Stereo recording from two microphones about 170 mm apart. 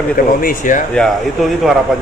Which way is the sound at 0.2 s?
55° left (ahead or behind).